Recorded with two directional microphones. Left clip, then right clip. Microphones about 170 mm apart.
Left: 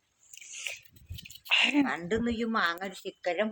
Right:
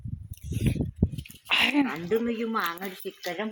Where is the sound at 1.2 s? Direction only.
15° right (ahead or behind).